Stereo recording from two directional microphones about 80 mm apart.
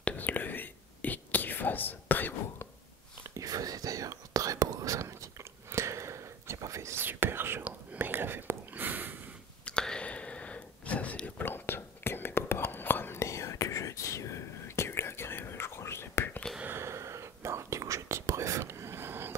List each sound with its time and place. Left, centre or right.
0.0 s whispering: centre
3.3 s whispering: right
9.7 s a sound: centre; by 16.3 s left
16.6 s whispering: right